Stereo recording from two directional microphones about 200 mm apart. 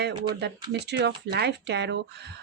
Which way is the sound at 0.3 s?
55° right (ahead or behind).